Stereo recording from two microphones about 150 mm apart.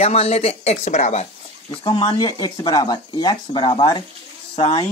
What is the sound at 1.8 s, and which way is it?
Speech, 30° left (ahead or behind).